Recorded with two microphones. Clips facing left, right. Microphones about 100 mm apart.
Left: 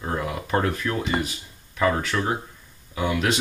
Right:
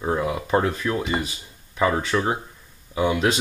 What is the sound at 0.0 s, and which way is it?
Speech, 15° right (ahead or behind).